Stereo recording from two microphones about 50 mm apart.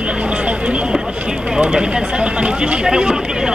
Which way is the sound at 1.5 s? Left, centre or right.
Right.